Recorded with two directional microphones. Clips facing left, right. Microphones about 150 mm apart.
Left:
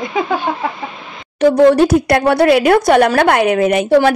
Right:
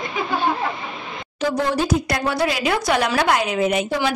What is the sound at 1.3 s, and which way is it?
Speech, 60° left (ahead or behind).